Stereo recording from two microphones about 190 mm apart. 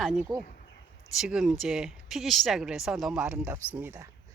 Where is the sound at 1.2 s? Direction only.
5° right (ahead or behind).